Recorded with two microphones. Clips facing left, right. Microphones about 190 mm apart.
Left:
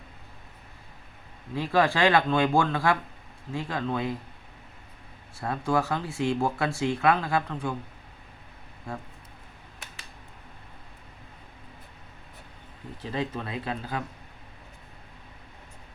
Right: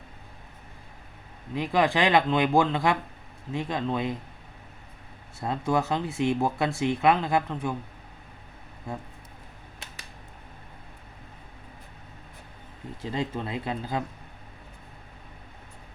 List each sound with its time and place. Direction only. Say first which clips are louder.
1.5 s speech: even; 15° right (ahead or behind)
5.4 s speech: even; 20° right (ahead or behind)
13.1 s speech: right 1 dB; 25° right (ahead or behind)